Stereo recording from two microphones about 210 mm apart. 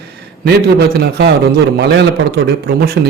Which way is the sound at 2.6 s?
50° right (ahead or behind).